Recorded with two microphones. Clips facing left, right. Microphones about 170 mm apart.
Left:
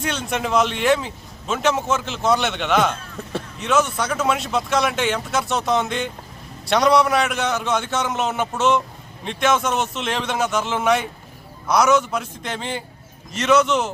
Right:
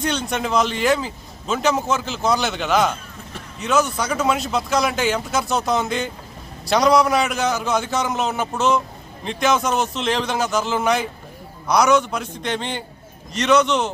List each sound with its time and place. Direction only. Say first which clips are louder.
0.0 s a man's voice: right 1 dB; centre (ahead or behind)